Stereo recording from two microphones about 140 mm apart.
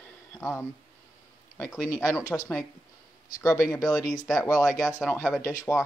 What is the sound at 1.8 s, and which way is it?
Speech, 20° left (ahead or behind).